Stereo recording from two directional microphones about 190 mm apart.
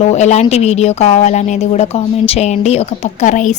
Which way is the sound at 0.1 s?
35° left (ahead or behind).